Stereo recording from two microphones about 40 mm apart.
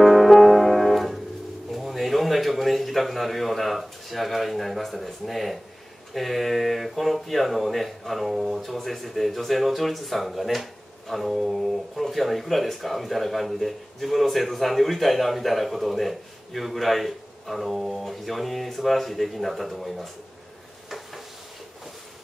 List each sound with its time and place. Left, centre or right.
0.0 s music: centre
1.7 s a man's voice: centre